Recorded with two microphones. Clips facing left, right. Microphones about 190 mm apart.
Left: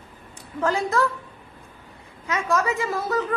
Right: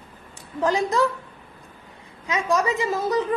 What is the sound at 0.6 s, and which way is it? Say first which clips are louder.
Speech: right 2 dB; 15° right (ahead or behind).